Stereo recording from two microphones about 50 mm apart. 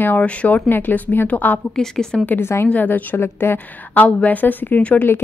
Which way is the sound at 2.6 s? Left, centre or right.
Left.